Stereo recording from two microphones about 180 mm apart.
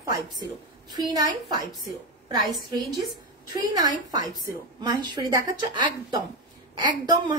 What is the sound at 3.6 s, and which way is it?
A woman's voice, 20° right (ahead or behind).